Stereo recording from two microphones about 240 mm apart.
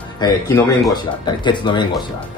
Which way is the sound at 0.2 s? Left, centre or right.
Centre.